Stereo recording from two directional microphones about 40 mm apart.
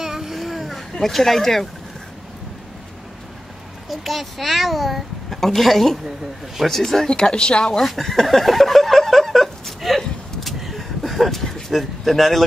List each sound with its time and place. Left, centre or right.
0.0 s a sound: centre
1.0 s speech: centre
3.9 s a child's voice: centre
6.0 s speech: centre
6.7 s speech: centre
7.2 s speech: left
7.9 s a sound: centre